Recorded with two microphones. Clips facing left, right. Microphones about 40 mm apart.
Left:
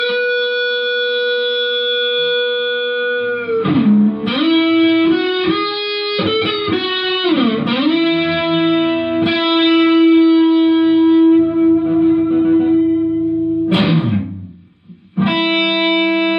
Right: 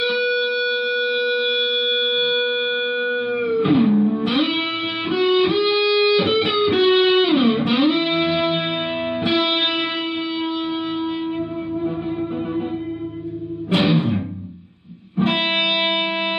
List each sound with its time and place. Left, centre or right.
3.5 s music: centre
7.2 s music: centre
9.7 s music: centre
10.7 s shofar: centre
11.6 s music: left